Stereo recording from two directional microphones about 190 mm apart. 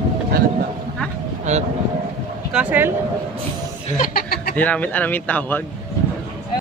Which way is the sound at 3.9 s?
50° left (ahead or behind).